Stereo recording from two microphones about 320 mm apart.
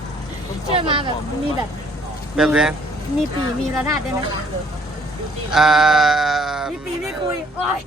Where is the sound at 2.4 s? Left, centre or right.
Centre.